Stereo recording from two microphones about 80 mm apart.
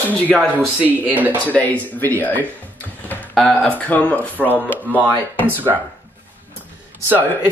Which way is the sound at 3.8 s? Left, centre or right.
Centre.